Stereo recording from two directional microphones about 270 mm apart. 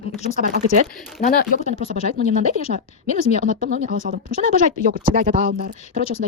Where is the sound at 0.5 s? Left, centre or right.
Right.